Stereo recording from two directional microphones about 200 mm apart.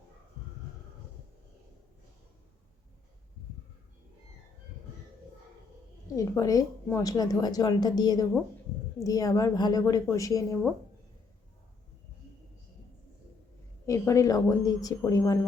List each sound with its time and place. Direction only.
6.1 s a woman's voice: 15° left (ahead or behind)
13.8 s a woman's voice: 15° left (ahead or behind)